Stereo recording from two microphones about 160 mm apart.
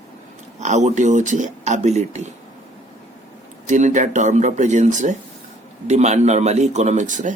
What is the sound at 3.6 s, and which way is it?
A man's voice, 50° right (ahead or behind).